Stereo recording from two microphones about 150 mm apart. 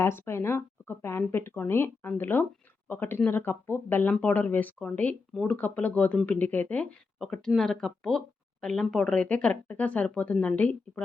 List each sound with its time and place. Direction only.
0.0 s speech: 15° left (ahead or behind)